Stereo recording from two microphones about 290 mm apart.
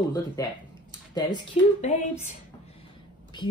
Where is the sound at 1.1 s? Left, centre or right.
Centre.